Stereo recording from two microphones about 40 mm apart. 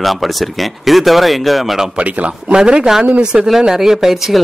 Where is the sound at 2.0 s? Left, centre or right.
Right.